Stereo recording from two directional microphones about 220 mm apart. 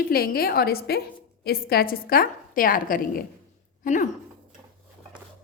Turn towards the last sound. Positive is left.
turn(degrees=35)  # may be behind; listen again after turning